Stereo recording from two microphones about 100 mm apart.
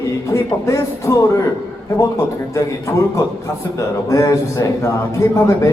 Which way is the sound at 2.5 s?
30° left (ahead or behind).